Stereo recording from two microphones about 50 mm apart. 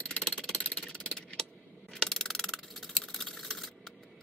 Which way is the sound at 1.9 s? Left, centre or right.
Centre.